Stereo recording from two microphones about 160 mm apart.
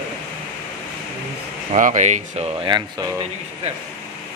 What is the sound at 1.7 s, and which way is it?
Speech, 50° right (ahead or behind).